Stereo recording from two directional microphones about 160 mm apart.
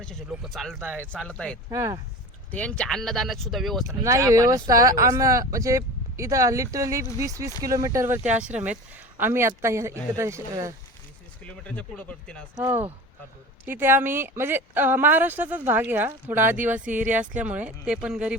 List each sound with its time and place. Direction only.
0.0 s speech: centre (ahead or behind)
0.8 s a woman's voice: 15° right (ahead or behind)
1.1 s speech: 5° left (ahead or behind)
1.7 s speech: 20° right (ahead or behind)
2.5 s speech: 10° left (ahead or behind)
3.8 s a woman's voice: 20° right (ahead or behind)
11.4 s speech: 10° left (ahead or behind)
12.5 s a woman's voice: 15° right (ahead or behind)